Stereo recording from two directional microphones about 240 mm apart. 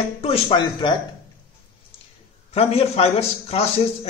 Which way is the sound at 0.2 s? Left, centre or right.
Left.